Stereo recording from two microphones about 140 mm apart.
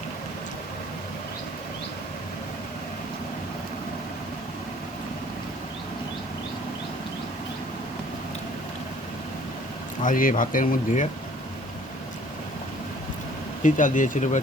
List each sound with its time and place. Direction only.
10.0 s speech: 75° left (ahead or behind)
13.6 s speech: 65° left (ahead or behind)